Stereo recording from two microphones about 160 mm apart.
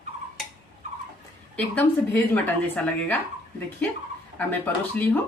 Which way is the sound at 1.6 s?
10° left (ahead or behind).